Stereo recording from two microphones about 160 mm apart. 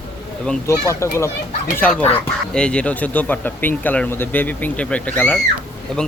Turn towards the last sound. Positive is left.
turn(degrees=5)  # may be behind; listen again after turning